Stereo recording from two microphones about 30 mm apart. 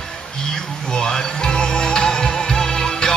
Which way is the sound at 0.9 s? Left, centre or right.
Left.